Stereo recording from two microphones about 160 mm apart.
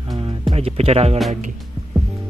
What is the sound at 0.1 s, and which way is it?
Music, 35° right (ahead or behind).